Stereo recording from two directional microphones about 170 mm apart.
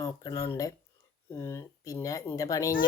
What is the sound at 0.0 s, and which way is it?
Speech, 20° left (ahead or behind).